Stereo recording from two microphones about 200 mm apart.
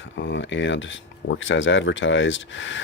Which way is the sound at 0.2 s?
65° left (ahead or behind).